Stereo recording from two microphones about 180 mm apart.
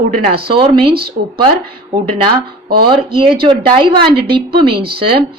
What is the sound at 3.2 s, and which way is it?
A woman's voice, 30° right (ahead or behind).